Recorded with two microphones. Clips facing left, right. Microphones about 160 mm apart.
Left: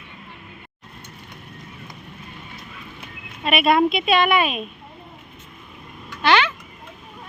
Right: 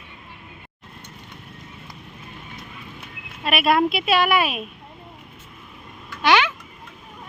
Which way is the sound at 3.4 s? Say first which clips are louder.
Left 2 dB; centre (ahead or behind).